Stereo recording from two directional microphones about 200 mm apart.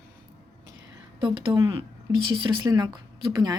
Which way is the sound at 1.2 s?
25° right (ahead or behind).